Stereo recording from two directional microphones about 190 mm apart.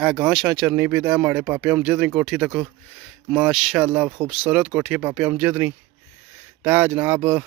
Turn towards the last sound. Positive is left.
turn(degrees=-10)  # may be behind; listen again after turning